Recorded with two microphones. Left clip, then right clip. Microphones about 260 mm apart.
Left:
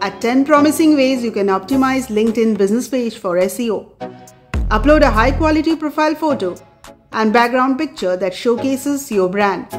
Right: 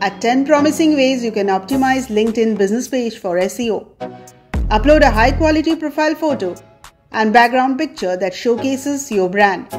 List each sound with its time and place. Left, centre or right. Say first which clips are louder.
0.0 s a woman's voice: right 1 dB; centre